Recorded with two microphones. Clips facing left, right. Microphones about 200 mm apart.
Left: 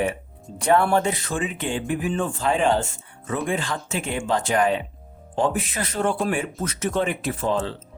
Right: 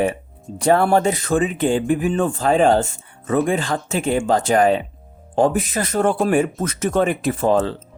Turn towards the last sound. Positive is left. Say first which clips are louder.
# right 7 dB
turn(degrees=-45)  # may be behind; listen again after turning